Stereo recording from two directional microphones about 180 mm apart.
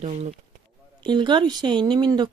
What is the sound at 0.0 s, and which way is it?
Speech, 40° right (ahead or behind).